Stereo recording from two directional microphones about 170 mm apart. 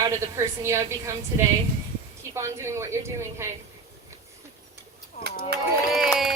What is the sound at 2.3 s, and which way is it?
A woman's voice, 15° right (ahead or behind).